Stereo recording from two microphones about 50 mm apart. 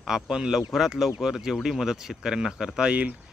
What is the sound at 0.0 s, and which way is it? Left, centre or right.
Speech, centre.